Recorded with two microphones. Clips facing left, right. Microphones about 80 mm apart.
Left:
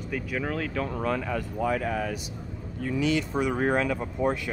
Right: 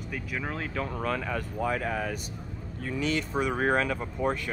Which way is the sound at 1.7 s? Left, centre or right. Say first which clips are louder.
Left 2 dB; right.